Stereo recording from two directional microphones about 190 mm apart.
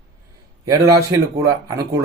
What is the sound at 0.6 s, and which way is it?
Speech, 20° right (ahead or behind).